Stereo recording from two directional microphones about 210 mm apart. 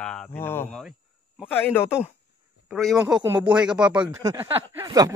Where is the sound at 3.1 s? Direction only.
20° right (ahead or behind).